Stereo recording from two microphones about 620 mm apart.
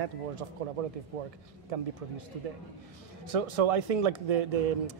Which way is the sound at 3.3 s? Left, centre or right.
Right.